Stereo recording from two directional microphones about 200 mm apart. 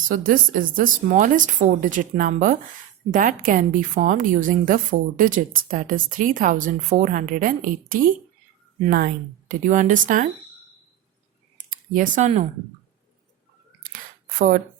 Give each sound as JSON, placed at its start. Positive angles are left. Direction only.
{"t": 0.1, "sound": "a woman's voice", "side_deg": -40}
{"t": 11.7, "sound": "speech", "side_deg": -40}
{"t": 14.3, "sound": "speech", "side_deg": -45}